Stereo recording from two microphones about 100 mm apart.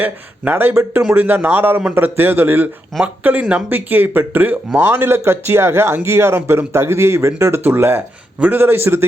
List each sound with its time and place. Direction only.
0.0 s speech: 20° right (ahead or behind)